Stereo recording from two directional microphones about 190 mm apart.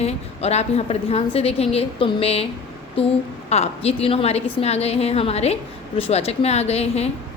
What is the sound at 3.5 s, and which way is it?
A woman's voice, 35° left (ahead or behind).